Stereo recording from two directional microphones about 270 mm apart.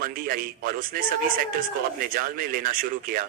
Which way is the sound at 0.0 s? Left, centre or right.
Right.